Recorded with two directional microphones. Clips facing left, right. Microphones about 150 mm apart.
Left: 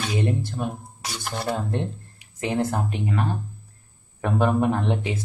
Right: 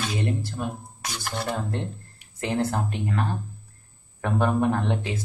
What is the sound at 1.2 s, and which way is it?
Speech, 10° left (ahead or behind).